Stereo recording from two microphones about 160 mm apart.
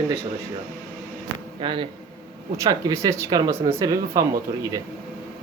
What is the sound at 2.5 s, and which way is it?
Speech, 20° right (ahead or behind).